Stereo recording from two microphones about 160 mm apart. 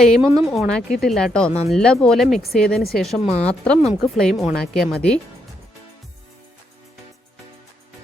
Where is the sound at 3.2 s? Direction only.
40° left (ahead or behind).